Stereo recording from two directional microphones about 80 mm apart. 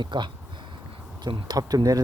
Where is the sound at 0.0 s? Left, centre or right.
Right.